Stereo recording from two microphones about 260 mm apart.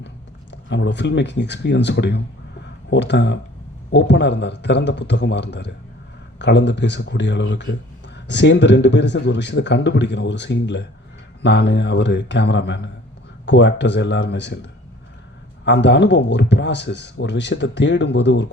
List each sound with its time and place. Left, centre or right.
0.5 s a man's voice: left